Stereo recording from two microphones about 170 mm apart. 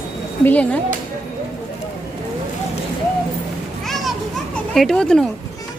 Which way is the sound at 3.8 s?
Centre (ahead or behind).